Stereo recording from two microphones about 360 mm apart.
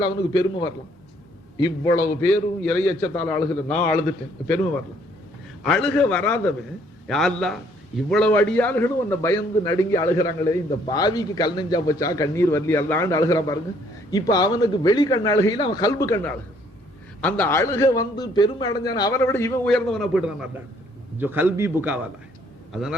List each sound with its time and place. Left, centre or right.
0.0 s a man's voice: centre
5.6 s a man's voice: centre